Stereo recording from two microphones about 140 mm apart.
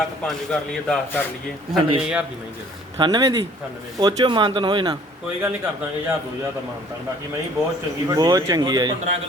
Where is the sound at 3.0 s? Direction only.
30° right (ahead or behind).